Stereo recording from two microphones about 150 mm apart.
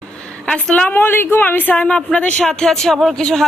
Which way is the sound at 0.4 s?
10° left (ahead or behind).